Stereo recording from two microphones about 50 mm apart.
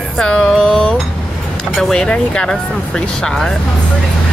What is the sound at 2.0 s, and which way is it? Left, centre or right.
Speech, centre.